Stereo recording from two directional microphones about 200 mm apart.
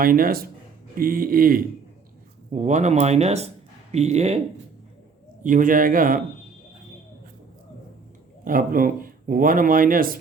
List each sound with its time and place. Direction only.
0.0 s speech: 45° right (ahead or behind)
5.4 s speech: 40° right (ahead or behind)
8.4 s speech: 45° right (ahead or behind)